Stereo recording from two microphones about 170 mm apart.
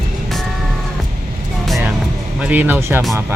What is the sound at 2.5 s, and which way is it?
Speech, 10° right (ahead or behind).